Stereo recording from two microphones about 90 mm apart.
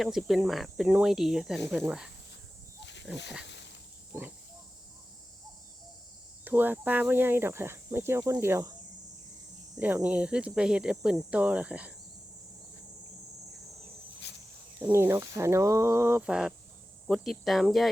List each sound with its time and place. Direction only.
0.0 s cricket: 5° right (ahead or behind)
4.1 s speech: 25° right (ahead or behind)
6.4 s speech: 20° right (ahead or behind)
9.7 s speech: 15° right (ahead or behind)
14.8 s speech: 30° right (ahead or behind)
16.2 s speech: 10° right (ahead or behind)
17.1 s cricket: centre (ahead or behind)